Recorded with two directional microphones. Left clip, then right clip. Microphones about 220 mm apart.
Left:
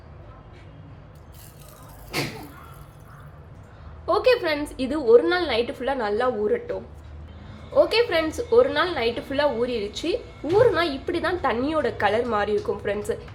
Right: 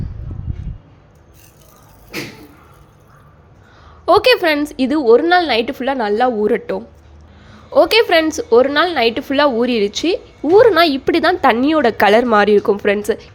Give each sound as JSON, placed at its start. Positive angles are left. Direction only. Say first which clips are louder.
{"t": 4.0, "sound": "a woman's voice", "louder": "right 9 dB", "side_deg": -45}